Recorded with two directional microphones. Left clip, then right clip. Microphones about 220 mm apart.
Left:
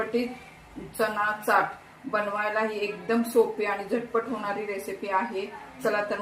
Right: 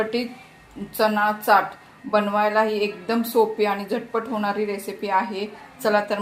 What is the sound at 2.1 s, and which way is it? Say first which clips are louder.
Speech: right 7 dB; 50° right (ahead or behind).